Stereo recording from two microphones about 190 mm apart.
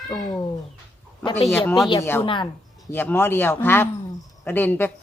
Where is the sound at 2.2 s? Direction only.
25° left (ahead or behind).